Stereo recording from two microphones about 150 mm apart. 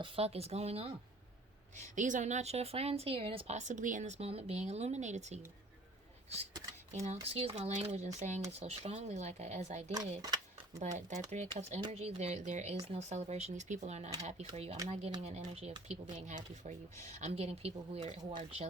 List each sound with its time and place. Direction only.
0.0 s a woman's voice: 45° right (ahead or behind)
1.7 s a woman's voice: 55° right (ahead or behind)
6.5 s speech: 20° right (ahead or behind)
7.0 s a woman's voice: 45° right (ahead or behind)
9.9 s speech: 25° right (ahead or behind)
10.8 s a woman's voice: 50° right (ahead or behind)